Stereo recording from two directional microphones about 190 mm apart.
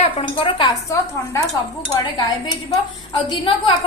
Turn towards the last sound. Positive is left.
turn(degrees=25)  # may be behind; listen again after turning